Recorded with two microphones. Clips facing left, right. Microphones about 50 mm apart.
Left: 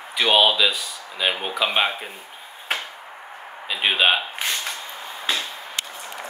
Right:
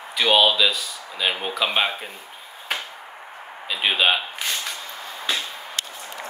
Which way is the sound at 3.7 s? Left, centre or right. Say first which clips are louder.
Left 1 dB; centre.